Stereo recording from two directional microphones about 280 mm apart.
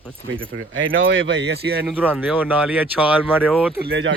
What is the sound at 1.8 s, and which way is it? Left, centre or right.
Speech, centre.